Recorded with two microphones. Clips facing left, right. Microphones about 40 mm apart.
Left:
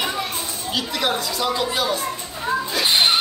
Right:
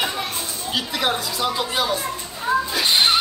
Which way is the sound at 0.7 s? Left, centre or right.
Centre.